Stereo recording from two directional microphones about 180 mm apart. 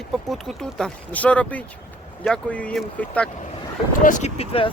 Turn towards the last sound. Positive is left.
turn(degrees=35)  # may be behind; listen again after turning